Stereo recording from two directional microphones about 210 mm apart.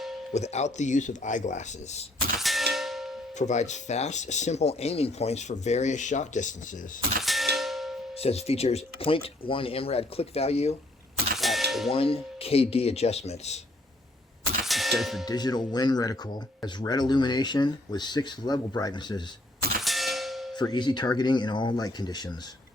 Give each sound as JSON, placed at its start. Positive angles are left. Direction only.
{"t": 0.3, "sound": "speech", "side_deg": 30}
{"t": 2.4, "sound": "clang", "side_deg": 0}
{"t": 2.7, "sound": "a sound", "side_deg": 0}
{"t": 3.3, "sound": "speech", "side_deg": 35}
{"t": 7.2, "sound": "clang", "side_deg": 0}
{"t": 7.5, "sound": "a sound", "side_deg": 0}
{"t": 8.2, "sound": "speech", "side_deg": 30}
{"t": 11.3, "sound": "a sound", "side_deg": 0}
{"t": 11.9, "sound": "speech", "side_deg": 25}
{"t": 14.6, "sound": "clang", "side_deg": 0}
{"t": 15.3, "sound": "speech", "side_deg": 20}
{"t": 19.8, "sound": "clang", "side_deg": 0}
{"t": 20.6, "sound": "speech", "side_deg": 20}